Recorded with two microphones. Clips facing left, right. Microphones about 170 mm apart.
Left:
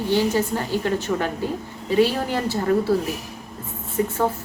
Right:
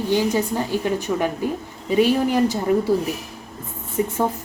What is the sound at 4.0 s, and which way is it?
Speech, 20° right (ahead or behind).